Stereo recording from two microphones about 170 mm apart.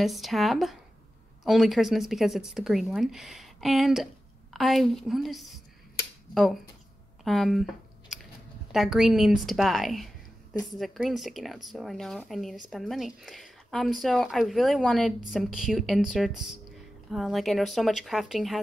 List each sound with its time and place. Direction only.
0.0 s speech: centre (ahead or behind)
7.2 s a sound: centre (ahead or behind)
8.7 s speech: centre (ahead or behind)